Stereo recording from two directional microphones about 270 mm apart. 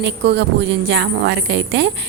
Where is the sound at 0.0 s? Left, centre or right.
Right.